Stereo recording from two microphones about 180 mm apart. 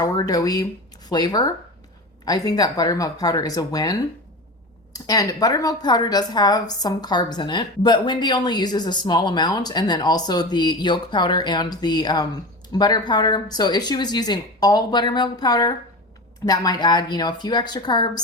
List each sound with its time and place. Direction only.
0.0 s speech: 20° left (ahead or behind)